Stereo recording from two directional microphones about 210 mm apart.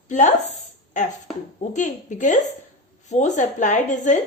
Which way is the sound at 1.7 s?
35° left (ahead or behind).